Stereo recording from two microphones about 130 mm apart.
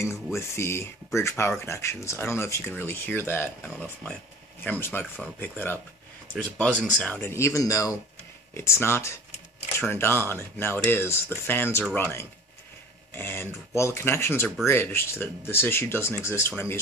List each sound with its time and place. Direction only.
0.0 s speech: 20° left (ahead or behind)
7.2 s speech: 20° left (ahead or behind)